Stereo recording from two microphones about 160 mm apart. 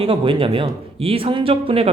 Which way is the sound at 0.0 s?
35° right (ahead or behind).